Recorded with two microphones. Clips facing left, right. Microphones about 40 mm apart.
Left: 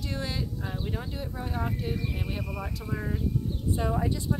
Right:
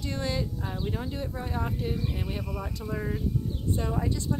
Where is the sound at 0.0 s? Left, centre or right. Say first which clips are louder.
Right 2 dB; centre.